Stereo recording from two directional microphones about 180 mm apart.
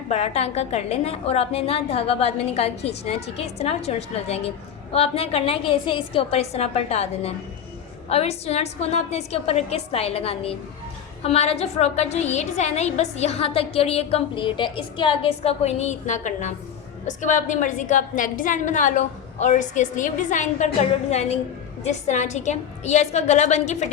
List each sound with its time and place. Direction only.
0.1 s a woman's voice: 35° left (ahead or behind)